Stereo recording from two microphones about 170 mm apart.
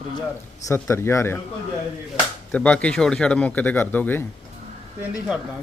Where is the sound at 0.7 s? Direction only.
15° left (ahead or behind).